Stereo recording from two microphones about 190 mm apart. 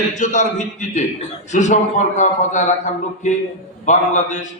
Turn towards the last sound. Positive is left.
turn(degrees=40)  # may be behind; listen again after turning